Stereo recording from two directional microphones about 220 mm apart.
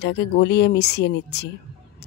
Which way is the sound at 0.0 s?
50° left (ahead or behind).